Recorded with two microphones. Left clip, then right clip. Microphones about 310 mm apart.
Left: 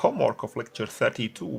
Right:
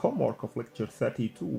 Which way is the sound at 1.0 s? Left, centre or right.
Left.